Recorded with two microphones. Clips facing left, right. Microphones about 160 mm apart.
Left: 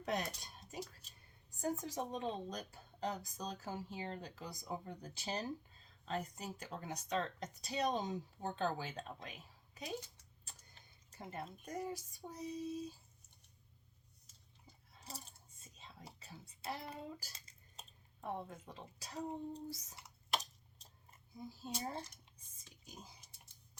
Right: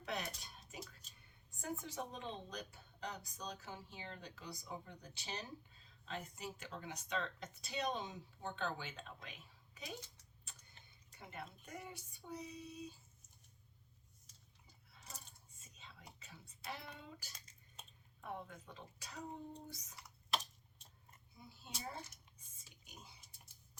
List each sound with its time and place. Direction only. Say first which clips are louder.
0.0 s speech: left 5 dB; 40° left (ahead or behind)
11.2 s speech: left 5 dB; 35° left (ahead or behind)
15.0 s whispering: left 5 dB; 30° left (ahead or behind)
21.5 s speech: left 5 dB; 35° left (ahead or behind)